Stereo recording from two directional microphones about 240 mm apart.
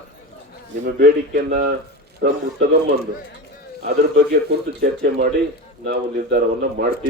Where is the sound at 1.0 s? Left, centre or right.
Right.